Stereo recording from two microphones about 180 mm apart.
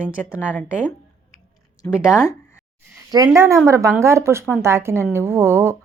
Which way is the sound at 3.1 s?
20° right (ahead or behind).